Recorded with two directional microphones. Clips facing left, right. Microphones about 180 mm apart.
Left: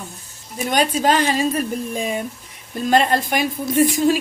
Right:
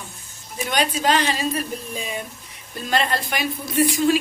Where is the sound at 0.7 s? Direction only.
45° left (ahead or behind).